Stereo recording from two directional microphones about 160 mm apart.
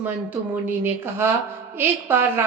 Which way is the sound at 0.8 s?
15° right (ahead or behind).